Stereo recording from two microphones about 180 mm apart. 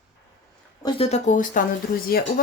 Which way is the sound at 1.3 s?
45° left (ahead or behind).